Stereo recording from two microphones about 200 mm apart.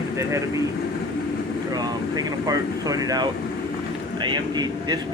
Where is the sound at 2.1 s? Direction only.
20° right (ahead or behind).